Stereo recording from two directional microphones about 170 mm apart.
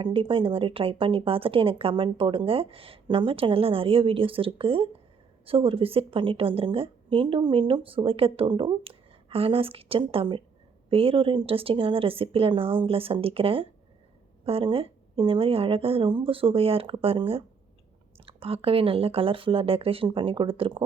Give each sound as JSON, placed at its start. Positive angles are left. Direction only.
{"t": 0.0, "sound": "speech", "side_deg": -30}